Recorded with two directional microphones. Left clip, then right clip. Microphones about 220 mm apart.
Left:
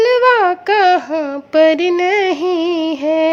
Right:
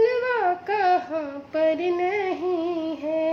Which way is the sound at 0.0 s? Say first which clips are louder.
Left 10 dB; 45° left (ahead or behind).